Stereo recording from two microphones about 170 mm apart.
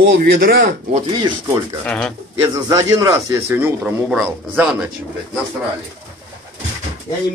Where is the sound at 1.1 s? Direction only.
25° right (ahead or behind).